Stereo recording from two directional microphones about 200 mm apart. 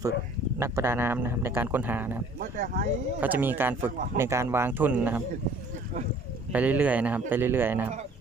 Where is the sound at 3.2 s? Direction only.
10° right (ahead or behind).